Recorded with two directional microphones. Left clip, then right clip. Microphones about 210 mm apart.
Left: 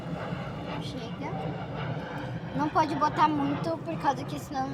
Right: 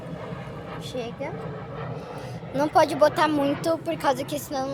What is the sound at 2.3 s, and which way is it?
Speech, 50° right (ahead or behind).